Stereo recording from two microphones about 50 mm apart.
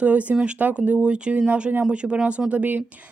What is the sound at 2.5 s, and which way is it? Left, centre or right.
Speech, right.